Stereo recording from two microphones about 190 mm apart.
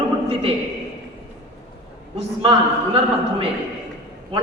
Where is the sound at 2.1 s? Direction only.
30° right (ahead or behind).